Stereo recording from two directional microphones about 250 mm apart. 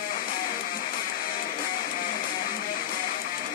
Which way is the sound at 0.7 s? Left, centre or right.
Left.